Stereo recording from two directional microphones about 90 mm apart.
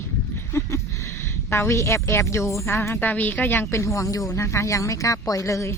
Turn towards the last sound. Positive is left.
turn(degrees=35)  # may be behind; listen again after turning